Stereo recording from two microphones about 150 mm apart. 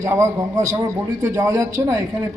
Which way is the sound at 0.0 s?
20° right (ahead or behind).